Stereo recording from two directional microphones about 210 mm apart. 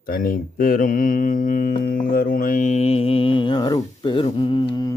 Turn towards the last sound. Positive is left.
turn(degrees=20)  # may be behind; listen again after turning